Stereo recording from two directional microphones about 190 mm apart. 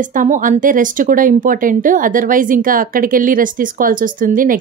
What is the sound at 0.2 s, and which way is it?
A woman's voice, 45° right (ahead or behind).